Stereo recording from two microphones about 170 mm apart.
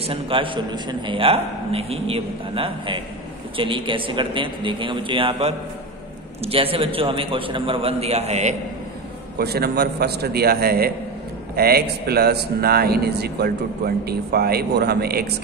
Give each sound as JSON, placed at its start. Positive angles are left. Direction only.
{"t": 0.0, "sound": "a man's voice", "side_deg": -30}
{"t": 9.4, "sound": "a man's voice", "side_deg": -70}